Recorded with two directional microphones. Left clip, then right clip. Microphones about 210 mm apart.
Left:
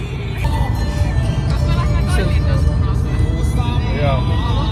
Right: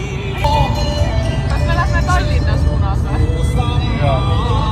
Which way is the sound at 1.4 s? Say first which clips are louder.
Right 6 dB; 45° right (ahead or behind).